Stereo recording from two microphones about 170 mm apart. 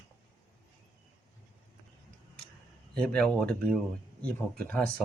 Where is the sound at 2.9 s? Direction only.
5° left (ahead or behind).